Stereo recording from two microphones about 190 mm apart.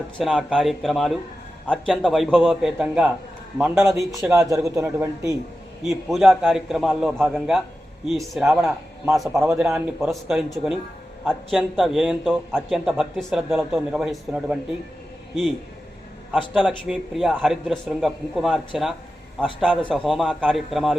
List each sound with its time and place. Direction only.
0.2 s a man's voice: 5° right (ahead or behind)
4.3 s speech: 15° right (ahead or behind)
5.9 s a man's voice: centre (ahead or behind)
16.3 s a man's voice: centre (ahead or behind)